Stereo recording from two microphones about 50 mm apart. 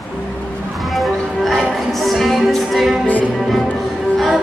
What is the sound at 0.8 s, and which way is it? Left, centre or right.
Music, centre.